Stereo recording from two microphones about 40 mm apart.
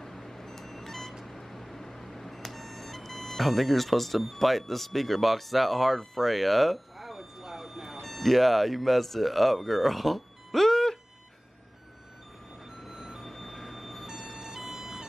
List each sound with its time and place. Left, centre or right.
0.0 s a sound: centre
12.8 s vehicle: centre
14.0 s emergency vehicle: centre